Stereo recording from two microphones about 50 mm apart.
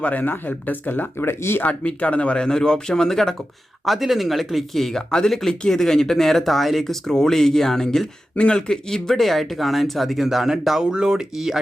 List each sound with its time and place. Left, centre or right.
0.0 s speech: left
1.6 s speech: left
2.4 s speech: centre
3.8 s speech: centre
8.4 s speech: centre